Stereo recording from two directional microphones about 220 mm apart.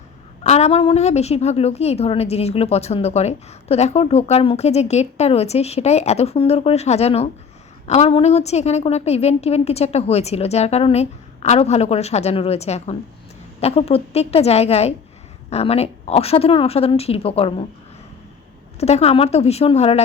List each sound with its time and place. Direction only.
0.4 s a woman's voice: 30° left (ahead or behind)
18.8 s a woman's voice: 30° left (ahead or behind)